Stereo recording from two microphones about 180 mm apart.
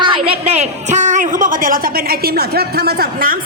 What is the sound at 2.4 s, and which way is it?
Speech, 60° right (ahead or behind).